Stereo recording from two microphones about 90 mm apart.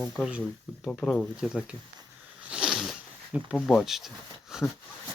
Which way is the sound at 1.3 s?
5° right (ahead or behind).